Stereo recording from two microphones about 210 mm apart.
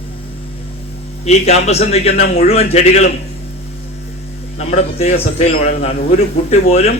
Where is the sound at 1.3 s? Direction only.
30° left (ahead or behind).